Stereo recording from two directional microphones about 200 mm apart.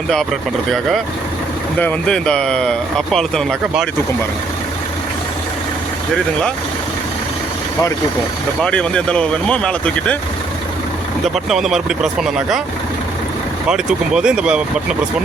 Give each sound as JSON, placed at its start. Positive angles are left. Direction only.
{"t": 0.7, "sound": "speech", "side_deg": 0}
{"t": 8.6, "sound": "speech", "side_deg": 5}
{"t": 11.4, "sound": "speech", "side_deg": 0}
{"t": 13.7, "sound": "speech", "side_deg": -5}